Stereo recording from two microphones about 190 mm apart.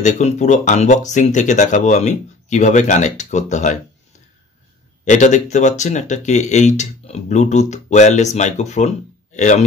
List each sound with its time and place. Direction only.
0.0 s speech: 40° left (ahead or behind)
5.0 s speech: 40° left (ahead or behind)